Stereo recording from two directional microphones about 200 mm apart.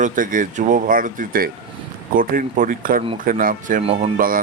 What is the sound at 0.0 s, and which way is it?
Speech, 40° right (ahead or behind).